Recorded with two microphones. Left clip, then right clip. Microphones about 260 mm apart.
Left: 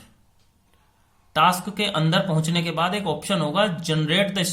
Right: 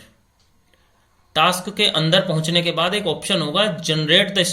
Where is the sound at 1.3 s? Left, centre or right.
Centre.